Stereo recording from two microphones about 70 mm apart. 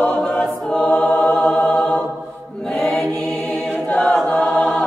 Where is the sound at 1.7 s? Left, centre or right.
Centre.